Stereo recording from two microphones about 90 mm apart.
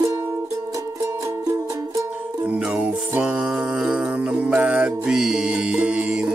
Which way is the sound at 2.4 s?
15° right (ahead or behind).